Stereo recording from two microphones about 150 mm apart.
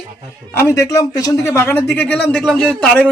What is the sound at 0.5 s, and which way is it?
A man's voice, 20° left (ahead or behind).